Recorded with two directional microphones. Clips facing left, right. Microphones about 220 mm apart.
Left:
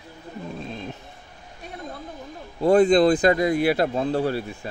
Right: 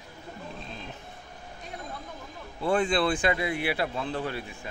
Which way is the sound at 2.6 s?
40° left (ahead or behind).